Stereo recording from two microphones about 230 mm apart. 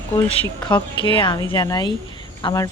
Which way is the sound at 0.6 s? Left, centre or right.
Left.